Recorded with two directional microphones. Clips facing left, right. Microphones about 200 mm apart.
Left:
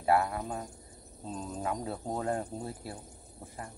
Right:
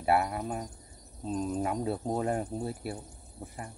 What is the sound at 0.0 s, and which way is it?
Speech, 15° right (ahead or behind).